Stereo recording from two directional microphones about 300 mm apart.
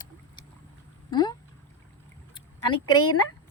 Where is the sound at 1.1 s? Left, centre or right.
Centre.